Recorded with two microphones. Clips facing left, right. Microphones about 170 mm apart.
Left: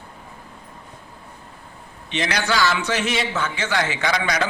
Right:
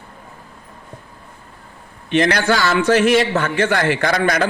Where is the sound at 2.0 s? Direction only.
50° right (ahead or behind).